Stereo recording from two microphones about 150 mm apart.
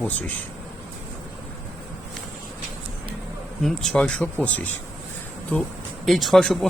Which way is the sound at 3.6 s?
5° left (ahead or behind).